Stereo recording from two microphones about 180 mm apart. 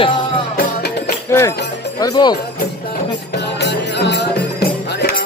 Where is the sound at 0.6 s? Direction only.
65° left (ahead or behind).